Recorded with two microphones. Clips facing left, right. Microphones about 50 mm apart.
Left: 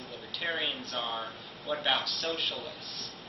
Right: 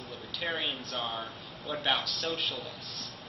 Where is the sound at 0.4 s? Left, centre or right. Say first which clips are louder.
Left 1 dB; centre.